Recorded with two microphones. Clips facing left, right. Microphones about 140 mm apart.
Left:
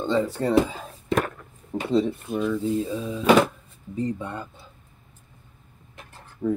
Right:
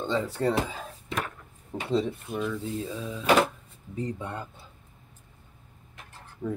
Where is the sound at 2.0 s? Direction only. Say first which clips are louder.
Left 5 dB; 5° left (ahead or behind).